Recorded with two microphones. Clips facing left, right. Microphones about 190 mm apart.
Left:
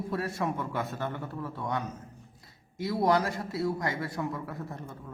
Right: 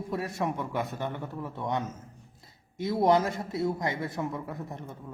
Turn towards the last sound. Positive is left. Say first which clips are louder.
# right 1 dB
turn(degrees=-20)  # may be behind; listen again after turning